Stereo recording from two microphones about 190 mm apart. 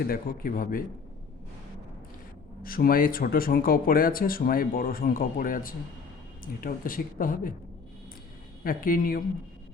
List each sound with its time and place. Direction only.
0.0 s speech: 50° left (ahead or behind)
2.6 s speech: 50° left (ahead or behind)
8.6 s speech: 50° left (ahead or behind)